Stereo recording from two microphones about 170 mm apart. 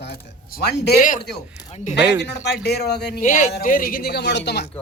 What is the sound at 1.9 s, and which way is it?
Speech, 80° left.